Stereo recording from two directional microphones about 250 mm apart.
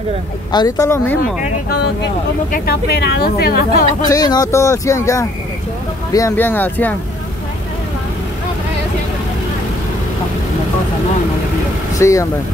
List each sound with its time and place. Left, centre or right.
0.5 s speech: centre
2.5 s a woman's voice: left
4.1 s speech: centre
12.0 s speech: centre